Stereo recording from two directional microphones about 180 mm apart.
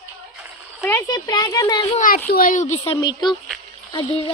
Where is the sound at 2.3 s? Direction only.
50° left (ahead or behind).